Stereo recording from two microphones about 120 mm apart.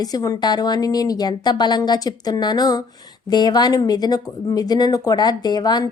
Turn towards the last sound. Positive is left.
turn(degrees=35)  # may be behind; listen again after turning